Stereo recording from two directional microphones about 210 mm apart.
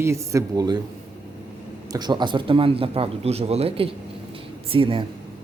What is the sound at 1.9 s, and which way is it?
Speech, 20° right (ahead or behind).